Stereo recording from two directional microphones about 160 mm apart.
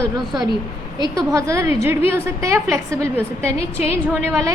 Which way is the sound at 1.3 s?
20° right (ahead or behind).